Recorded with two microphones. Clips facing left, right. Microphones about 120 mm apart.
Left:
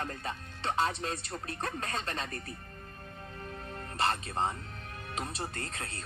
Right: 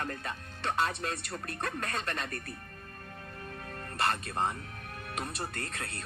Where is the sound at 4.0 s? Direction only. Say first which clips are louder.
Even; 25° left (ahead or behind).